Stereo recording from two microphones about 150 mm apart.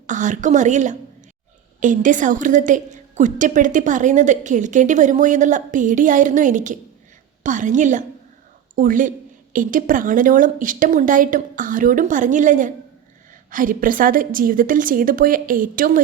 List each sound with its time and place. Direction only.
0.1 s a woman's voice: 55° right (ahead or behind)